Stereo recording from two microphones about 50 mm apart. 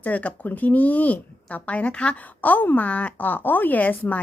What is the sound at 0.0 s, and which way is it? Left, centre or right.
Speech, left.